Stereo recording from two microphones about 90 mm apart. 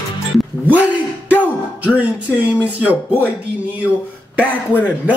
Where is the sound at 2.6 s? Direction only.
15° right (ahead or behind).